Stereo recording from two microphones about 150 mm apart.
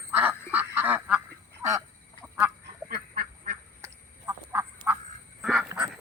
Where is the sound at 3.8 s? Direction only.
20° right (ahead or behind); by 5.7 s centre (ahead or behind).